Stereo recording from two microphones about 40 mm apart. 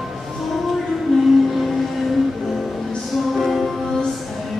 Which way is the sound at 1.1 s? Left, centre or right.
Centre.